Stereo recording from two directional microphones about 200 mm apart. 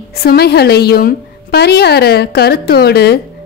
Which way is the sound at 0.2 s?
50° left (ahead or behind).